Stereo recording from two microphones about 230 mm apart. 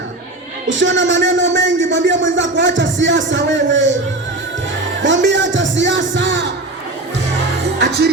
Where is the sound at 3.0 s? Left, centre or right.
Right.